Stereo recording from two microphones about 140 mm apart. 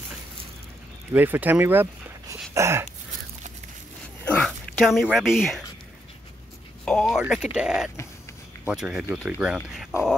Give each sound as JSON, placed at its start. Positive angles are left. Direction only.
{"t": 1.1, "sound": "speech", "side_deg": -10}
{"t": 2.5, "sound": "a sound", "side_deg": -20}
{"t": 4.4, "sound": "speech", "side_deg": 0}
{"t": 6.8, "sound": "speech", "side_deg": 5}